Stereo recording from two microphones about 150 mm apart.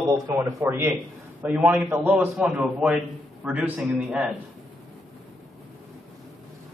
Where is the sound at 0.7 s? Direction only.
15° right (ahead or behind).